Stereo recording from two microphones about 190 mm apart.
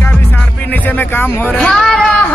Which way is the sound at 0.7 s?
10° left (ahead or behind).